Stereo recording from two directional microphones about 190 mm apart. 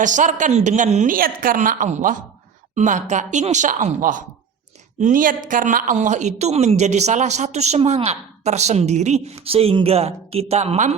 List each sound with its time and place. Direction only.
0.0 s a woman's voice: 40° right (ahead or behind)